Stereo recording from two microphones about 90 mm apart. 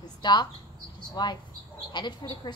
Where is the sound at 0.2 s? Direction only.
55° left (ahead or behind).